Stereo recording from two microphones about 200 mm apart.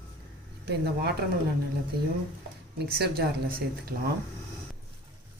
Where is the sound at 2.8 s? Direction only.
55° right (ahead or behind).